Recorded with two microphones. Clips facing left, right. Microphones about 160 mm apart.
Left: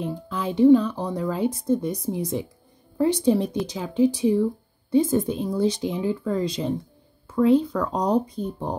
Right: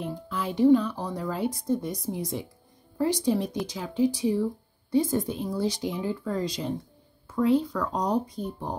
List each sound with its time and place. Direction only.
0.3 s a woman's voice: 20° left (ahead or behind)